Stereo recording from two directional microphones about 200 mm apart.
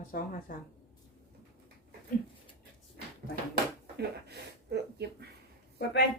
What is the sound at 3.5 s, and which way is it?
Speech, 55° right (ahead or behind).